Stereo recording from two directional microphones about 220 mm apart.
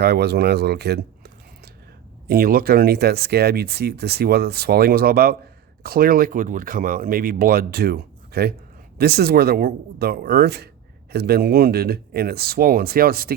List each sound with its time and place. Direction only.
0.0 s speech: 45° right (ahead or behind)